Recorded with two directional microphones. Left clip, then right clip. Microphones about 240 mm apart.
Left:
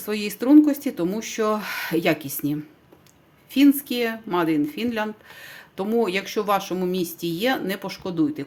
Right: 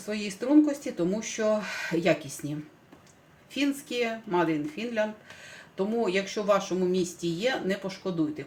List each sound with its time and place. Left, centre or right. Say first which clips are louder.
0.0 s speech: left 6 dB; left
3.5 s speech: left 10 dB; left